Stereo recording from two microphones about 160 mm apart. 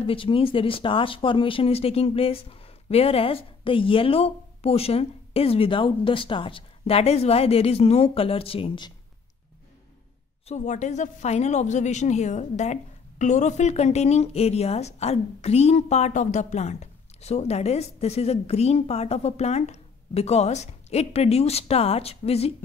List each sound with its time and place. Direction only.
0.0 s speech: 35° left (ahead or behind)
10.4 s a woman's voice: 45° left (ahead or behind)